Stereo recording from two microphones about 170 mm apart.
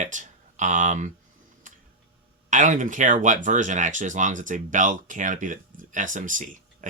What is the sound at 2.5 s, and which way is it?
Speech, 50° right (ahead or behind).